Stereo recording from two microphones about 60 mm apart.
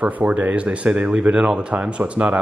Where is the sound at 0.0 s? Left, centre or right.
Right.